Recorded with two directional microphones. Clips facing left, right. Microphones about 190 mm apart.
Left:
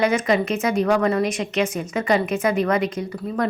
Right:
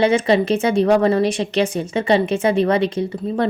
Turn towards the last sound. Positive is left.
turn(degrees=-30)  # may be behind; listen again after turning